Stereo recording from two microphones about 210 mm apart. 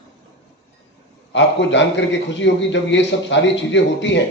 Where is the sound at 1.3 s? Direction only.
60° left (ahead or behind).